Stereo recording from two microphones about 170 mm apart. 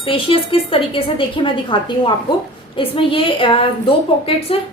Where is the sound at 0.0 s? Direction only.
30° left (ahead or behind).